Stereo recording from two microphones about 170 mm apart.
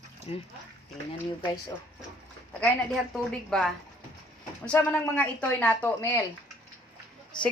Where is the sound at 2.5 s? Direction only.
5° left (ahead or behind).